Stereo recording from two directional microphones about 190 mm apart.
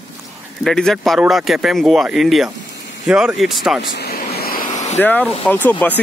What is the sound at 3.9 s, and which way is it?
Vehicle, 55° left (ahead or behind).